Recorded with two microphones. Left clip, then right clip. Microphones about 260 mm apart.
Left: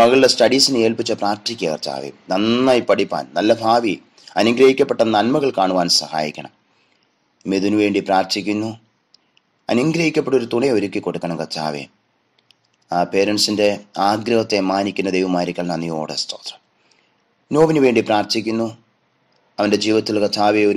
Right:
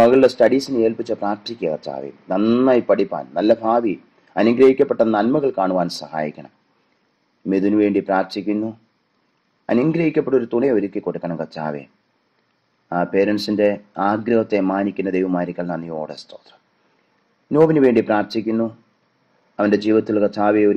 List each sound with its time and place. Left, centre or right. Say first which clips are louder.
0.0 s speech: even; left